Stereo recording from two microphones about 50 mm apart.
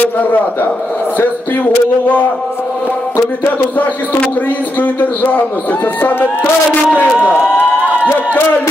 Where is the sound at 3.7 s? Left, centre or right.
Left.